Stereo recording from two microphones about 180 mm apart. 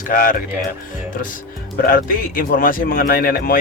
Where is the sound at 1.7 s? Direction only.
50° left (ahead or behind).